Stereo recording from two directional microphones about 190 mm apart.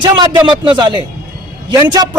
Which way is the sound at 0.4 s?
25° right (ahead or behind).